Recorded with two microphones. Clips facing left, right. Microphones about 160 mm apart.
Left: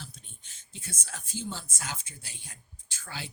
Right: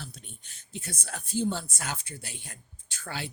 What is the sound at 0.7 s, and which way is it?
A woman's voice, 60° right (ahead or behind).